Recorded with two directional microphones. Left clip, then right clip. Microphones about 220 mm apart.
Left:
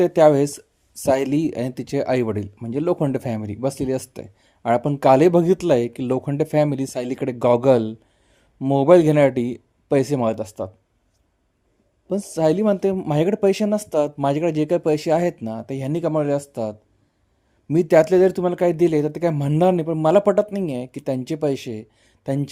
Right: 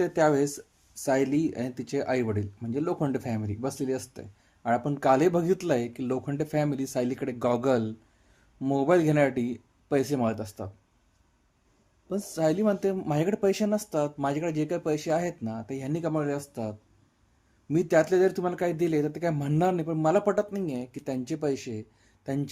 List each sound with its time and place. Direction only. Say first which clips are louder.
0.0 s speech: left 9 dB; 40° left (ahead or behind)
12.0 s speech: left 7 dB; 35° left (ahead or behind)
17.7 s speech: left 8 dB; 40° left (ahead or behind)